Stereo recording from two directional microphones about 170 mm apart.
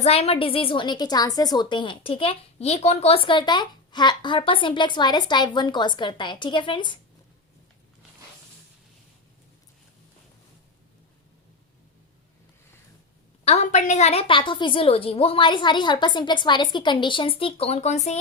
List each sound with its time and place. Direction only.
0.0 s a woman's voice: 35° left (ahead or behind)
13.4 s a woman's voice: 40° left (ahead or behind)